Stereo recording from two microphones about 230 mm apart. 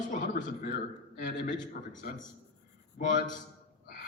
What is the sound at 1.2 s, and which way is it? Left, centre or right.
A man's voice, left.